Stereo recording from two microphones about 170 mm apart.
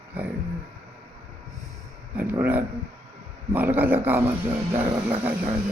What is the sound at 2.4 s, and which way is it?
Speech, 10° right (ahead or behind).